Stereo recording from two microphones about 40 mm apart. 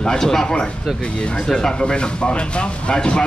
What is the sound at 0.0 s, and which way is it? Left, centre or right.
Speech, centre.